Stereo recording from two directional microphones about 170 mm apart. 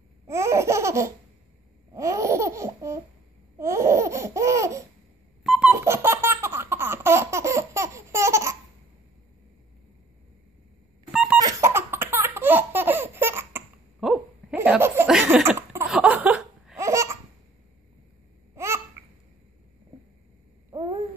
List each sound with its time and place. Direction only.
0.3 s laughter: 15° right (ahead or behind)
5.4 s music: centre (ahead or behind)
5.8 s laughter: 15° right (ahead or behind)
11.1 s a sound: 5° right (ahead or behind)
11.4 s laughter: 15° right (ahead or behind)
14.0 s a sound: 10° right (ahead or behind)
15.9 s laughter: 10° right (ahead or behind)